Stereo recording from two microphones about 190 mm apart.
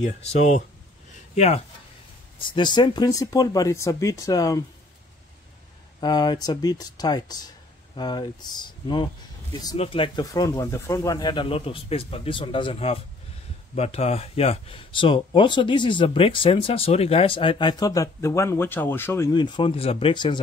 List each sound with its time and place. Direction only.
0.0 s speech: 40° left (ahead or behind)
1.1 s a sound: 35° left (ahead or behind)
2.3 s speech: 25° left (ahead or behind)
5.9 s speech: 20° left (ahead or behind)